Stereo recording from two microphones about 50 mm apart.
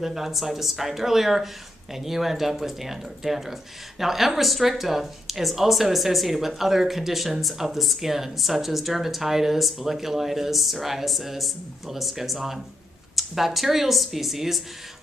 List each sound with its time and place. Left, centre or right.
0.0 s speech: centre